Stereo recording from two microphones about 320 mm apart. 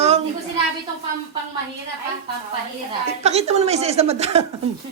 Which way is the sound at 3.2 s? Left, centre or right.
Centre.